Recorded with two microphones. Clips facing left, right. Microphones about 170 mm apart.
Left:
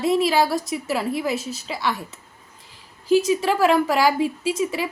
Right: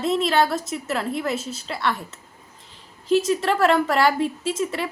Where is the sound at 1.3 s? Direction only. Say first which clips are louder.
Left 1 dB; 30° right (ahead or behind).